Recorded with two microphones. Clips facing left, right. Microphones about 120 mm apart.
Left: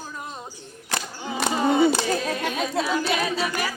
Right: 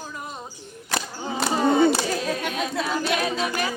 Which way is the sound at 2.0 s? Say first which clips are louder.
Left 1 dB; 30° left (ahead or behind).